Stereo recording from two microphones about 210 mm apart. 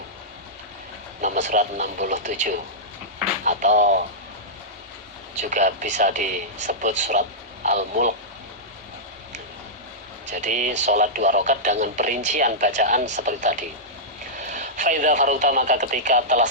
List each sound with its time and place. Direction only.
1.2 s speech: 35° right (ahead or behind)
5.4 s speech: 35° right (ahead or behind)
10.3 s speech: 35° right (ahead or behind)